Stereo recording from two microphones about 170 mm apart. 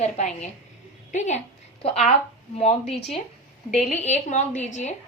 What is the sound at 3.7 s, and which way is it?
Speech, 40° left (ahead or behind).